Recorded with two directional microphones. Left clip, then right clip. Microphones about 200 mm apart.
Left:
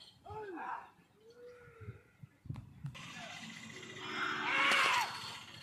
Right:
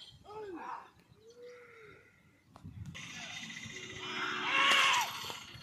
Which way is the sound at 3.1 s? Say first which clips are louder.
Right 4 dB; 55° left (ahead or behind).